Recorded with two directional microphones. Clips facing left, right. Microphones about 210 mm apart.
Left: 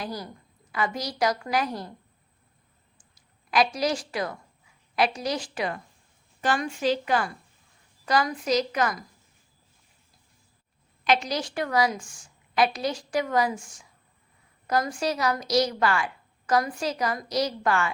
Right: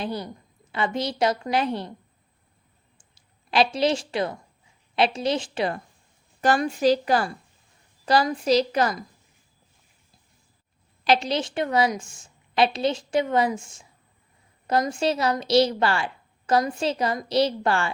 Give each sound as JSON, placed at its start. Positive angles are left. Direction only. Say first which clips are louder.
{"t": 0.0, "sound": "a woman's voice", "louder": "right 4 dB", "side_deg": -25}
{"t": 3.2, "sound": "a woman's voice", "louder": "right 2 dB", "side_deg": -30}
{"t": 11.0, "sound": "a woman's voice", "louder": "right 3 dB", "side_deg": -30}